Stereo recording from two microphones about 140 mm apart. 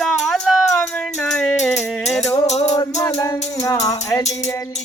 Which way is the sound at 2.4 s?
50° left (ahead or behind).